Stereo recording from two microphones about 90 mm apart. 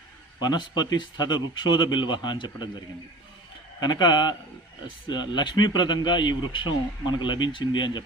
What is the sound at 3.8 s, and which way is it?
Speech, 55° left (ahead or behind).